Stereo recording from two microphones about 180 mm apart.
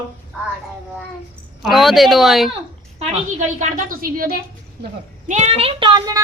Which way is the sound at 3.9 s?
50° right (ahead or behind).